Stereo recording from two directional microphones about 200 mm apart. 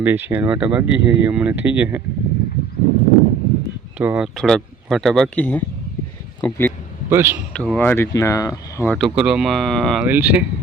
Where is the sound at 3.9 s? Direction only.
5° right (ahead or behind); by 6.7 s 10° left (ahead or behind).